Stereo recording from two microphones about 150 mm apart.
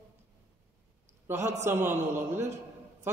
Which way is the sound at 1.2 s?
15° right (ahead or behind).